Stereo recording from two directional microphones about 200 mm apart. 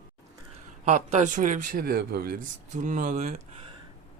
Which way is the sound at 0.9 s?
35° right (ahead or behind).